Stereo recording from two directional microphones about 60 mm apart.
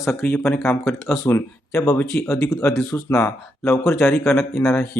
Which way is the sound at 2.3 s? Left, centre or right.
Left.